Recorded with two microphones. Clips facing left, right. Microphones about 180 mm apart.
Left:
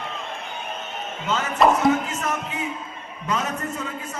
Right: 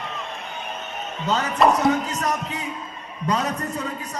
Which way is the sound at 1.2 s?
40° right (ahead or behind).